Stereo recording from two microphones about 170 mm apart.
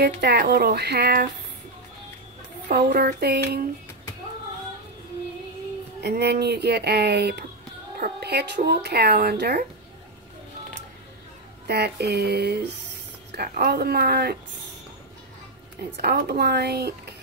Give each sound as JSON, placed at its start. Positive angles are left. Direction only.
{"t": 0.0, "sound": "speech", "side_deg": -75}
{"t": 2.7, "sound": "a woman's voice", "side_deg": -65}
{"t": 6.0, "sound": "speech", "side_deg": -70}
{"t": 11.6, "sound": "a woman's voice", "side_deg": -70}
{"t": 16.0, "sound": "speech", "side_deg": -70}